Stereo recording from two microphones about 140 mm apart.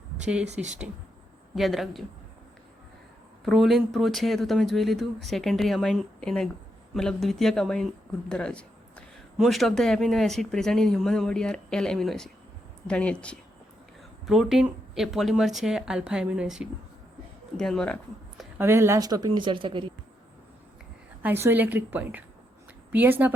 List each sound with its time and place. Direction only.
0.5 s speech: 55° right (ahead or behind)
1.5 s speech: centre (ahead or behind)
3.4 s speech: centre (ahead or behind)
18.6 s speech: 20° right (ahead or behind); by 19.9 s 35° right (ahead or behind)
21.2 s a woman's voice: 15° right (ahead or behind)